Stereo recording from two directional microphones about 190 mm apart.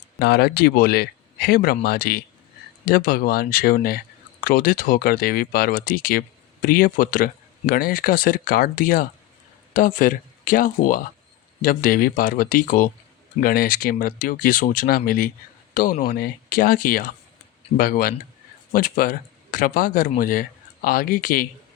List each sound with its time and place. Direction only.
0.2 s speech: 55° left (ahead or behind)